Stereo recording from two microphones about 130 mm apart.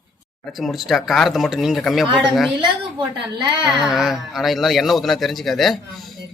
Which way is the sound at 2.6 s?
35° right (ahead or behind).